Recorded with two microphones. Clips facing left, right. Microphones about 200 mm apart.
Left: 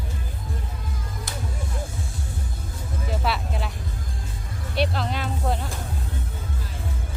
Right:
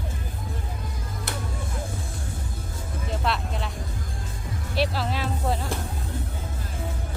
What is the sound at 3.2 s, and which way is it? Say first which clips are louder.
Speech: even; 5° left (ahead or behind).